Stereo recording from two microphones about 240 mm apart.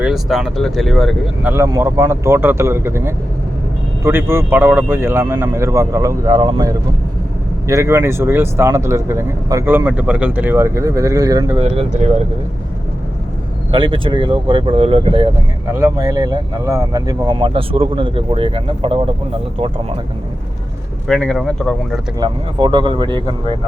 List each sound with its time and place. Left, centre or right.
0.0 s speech: centre
1.5 s speech: centre; by 12.2 s right
13.7 s speech: centre
21.1 s speech: centre
22.2 s speech: centre